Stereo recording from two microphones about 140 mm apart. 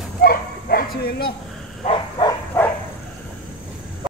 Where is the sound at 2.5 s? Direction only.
10° left (ahead or behind).